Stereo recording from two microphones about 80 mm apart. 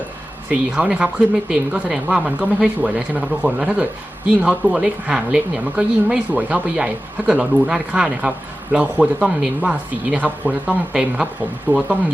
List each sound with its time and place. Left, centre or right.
0.5 s speech: centre
11.7 s speech: right